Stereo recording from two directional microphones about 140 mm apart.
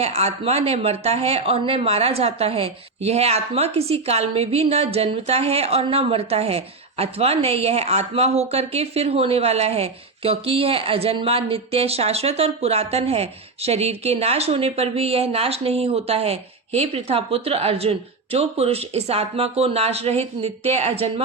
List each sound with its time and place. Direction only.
0.0 s speech: 50° right (ahead or behind)